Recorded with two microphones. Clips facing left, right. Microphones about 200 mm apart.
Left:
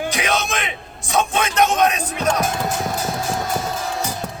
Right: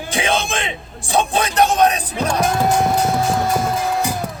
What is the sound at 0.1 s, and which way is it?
A man's voice, 30° right (ahead or behind).